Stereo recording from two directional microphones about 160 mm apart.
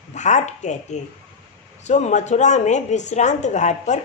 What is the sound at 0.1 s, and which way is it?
A woman's voice, 50° left (ahead or behind).